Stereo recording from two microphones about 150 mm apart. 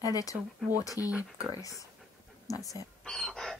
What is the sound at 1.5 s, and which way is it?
Speech, 25° left (ahead or behind).